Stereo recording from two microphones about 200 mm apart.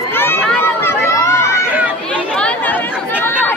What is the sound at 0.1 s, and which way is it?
Run, 10° left (ahead or behind).